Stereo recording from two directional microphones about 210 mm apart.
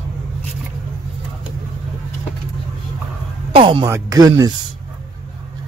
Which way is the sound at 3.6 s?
25° right (ahead or behind).